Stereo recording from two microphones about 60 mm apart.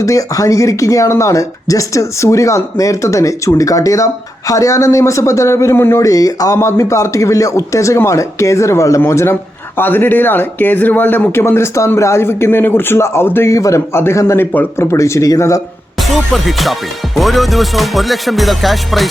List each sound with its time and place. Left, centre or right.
0.0 s speech: left
5.7 s speech: left
6.0 s speech: left
6.6 s speech: left
9.7 s speech: left
11.3 s speech: left
12.2 s speech: left
13.5 s speech: left
13.9 s speech: left
14.3 s speech: left
14.8 s speech: left
16.0 s music: centre